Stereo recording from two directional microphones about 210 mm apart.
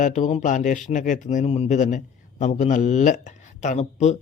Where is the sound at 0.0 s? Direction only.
35° left (ahead or behind).